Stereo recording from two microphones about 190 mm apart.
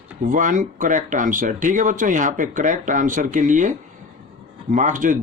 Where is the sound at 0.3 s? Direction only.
45° right (ahead or behind).